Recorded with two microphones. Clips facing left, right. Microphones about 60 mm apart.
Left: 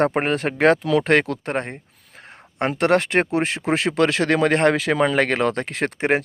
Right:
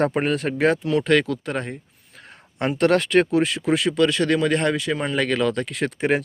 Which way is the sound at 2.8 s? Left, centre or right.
Left.